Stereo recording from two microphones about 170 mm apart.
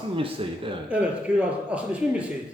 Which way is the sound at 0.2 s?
30° right (ahead or behind).